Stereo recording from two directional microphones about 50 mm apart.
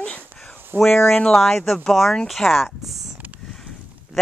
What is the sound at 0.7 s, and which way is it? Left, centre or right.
Speech, right.